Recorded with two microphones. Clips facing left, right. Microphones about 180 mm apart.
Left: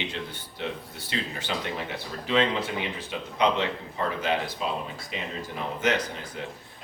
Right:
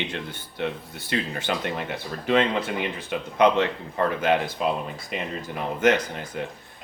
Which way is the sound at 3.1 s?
55° right (ahead or behind).